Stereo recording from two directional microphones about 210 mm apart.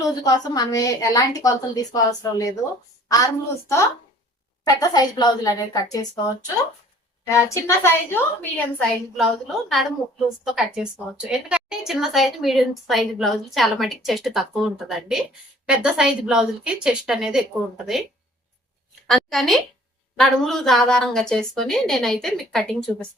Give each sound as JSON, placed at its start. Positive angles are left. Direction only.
{"t": 0.0, "sound": "a woman's voice", "side_deg": 20}
{"t": 7.3, "sound": "a woman's voice", "side_deg": 15}
{"t": 19.0, "sound": "a woman's voice", "side_deg": 0}